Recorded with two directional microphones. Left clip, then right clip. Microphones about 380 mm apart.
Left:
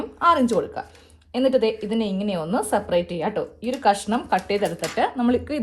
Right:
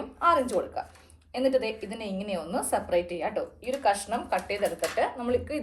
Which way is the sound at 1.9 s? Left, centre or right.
Left.